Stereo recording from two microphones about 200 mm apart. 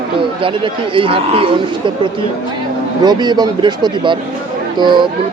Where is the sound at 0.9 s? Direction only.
25° right (ahead or behind).